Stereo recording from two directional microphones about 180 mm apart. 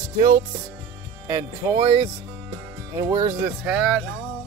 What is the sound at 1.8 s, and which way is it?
Speech, 30° right (ahead or behind).